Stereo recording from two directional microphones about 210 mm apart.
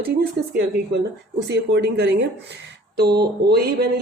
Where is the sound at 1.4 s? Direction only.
55° right (ahead or behind).